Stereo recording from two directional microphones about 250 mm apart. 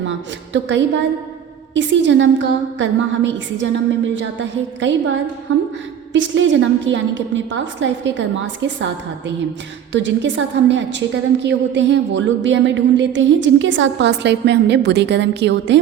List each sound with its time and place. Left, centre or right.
0.0 s a woman's voice: right
6.1 s a woman's voice: right